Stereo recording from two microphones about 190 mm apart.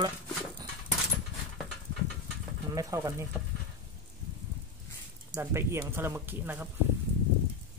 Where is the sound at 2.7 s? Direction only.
15° right (ahead or behind).